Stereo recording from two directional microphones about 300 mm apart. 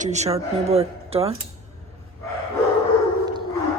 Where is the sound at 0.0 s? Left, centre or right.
Right.